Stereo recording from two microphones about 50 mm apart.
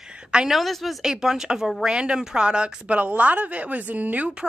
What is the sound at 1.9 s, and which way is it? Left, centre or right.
Speech, centre.